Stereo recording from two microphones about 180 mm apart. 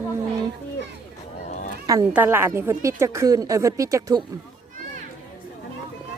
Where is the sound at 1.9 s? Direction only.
15° right (ahead or behind).